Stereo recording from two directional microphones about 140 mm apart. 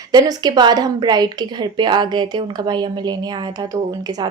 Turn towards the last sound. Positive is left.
turn(degrees=-25)  # may be behind; listen again after turning